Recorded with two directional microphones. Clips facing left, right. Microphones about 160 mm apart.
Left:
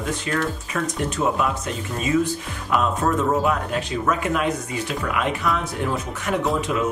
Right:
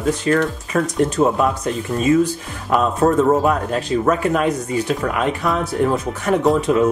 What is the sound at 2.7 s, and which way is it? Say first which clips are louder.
A man's voice: right 5 dB; 35° right (ahead or behind).